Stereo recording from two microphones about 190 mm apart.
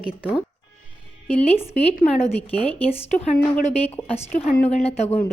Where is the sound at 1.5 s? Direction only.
35° left (ahead or behind).